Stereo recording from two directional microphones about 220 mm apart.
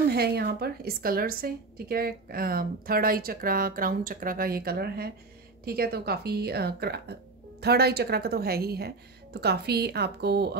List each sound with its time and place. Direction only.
0.1 s a woman's voice: 45° right (ahead or behind)